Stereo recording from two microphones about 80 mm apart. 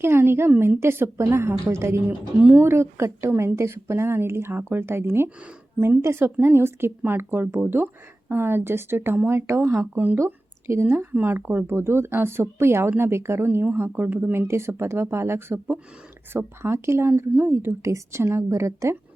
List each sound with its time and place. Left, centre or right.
0.0 s a woman's voice: right
10.2 s a woman's voice: right